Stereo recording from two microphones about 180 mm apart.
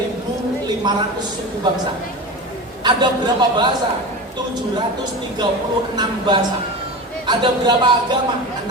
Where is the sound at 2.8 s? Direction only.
25° right (ahead or behind).